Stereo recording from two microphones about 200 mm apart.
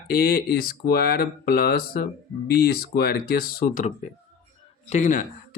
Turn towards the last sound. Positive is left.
turn(degrees=35)  # may be behind; listen again after turning